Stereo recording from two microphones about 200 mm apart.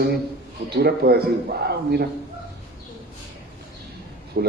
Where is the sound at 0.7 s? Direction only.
55° right (ahead or behind).